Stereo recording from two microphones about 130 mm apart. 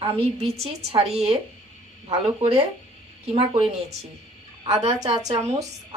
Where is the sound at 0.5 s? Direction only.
50° right (ahead or behind).